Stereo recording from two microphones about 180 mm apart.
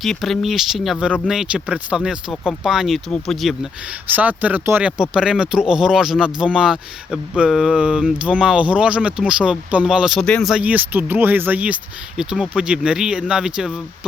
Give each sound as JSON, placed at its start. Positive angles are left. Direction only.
{"t": 0.0, "sound": "speech", "side_deg": 0}
{"t": 4.1, "sound": "speech", "side_deg": -10}